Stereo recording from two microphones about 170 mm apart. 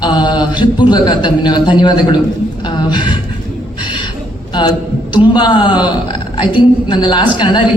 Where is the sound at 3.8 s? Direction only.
30° left (ahead or behind).